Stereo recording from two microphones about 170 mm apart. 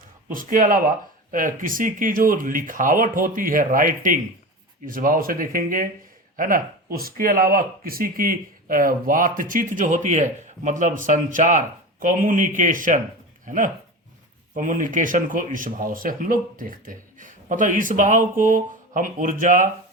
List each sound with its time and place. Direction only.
0.3 s speech: 55° right (ahead or behind)